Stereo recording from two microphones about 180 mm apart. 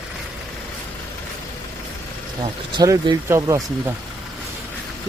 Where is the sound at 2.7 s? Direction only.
20° right (ahead or behind).